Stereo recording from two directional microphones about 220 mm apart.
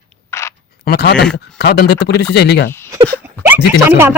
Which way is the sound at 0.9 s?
50° left (ahead or behind).